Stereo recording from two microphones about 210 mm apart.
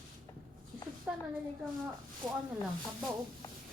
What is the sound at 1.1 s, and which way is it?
Speech, 5° right (ahead or behind).